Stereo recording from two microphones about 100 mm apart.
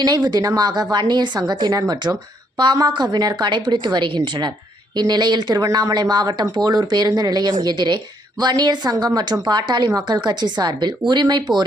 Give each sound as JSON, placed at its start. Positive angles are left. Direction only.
{"t": 0.0, "sound": "speech", "side_deg": -45}